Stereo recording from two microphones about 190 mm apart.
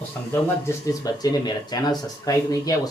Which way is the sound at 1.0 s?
20° left (ahead or behind).